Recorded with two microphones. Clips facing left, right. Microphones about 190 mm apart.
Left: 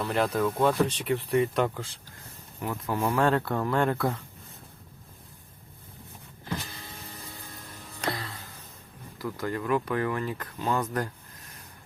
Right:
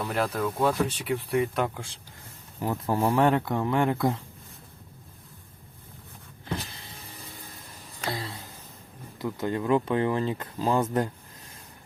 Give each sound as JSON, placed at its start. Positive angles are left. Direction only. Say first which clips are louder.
{"t": 0.1, "sound": "speech", "louder": "left 3 dB", "side_deg": 0}
{"t": 2.6, "sound": "speech", "louder": "right 3 dB", "side_deg": -30}
{"t": 3.2, "sound": "speech", "louder": "left 1 dB", "side_deg": -15}
{"t": 8.1, "sound": "a sound", "louder": "right 3 dB", "side_deg": -25}
{"t": 9.1, "sound": "speech", "louder": "right 3 dB", "side_deg": -20}